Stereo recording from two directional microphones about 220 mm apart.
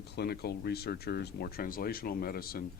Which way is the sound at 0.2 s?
45° left (ahead or behind).